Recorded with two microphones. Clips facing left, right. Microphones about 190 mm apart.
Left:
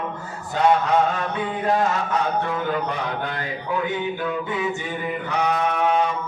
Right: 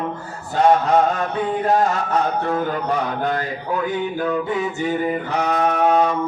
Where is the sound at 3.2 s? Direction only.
40° right (ahead or behind).